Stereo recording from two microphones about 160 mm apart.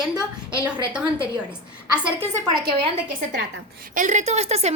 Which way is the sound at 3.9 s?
50° right (ahead or behind).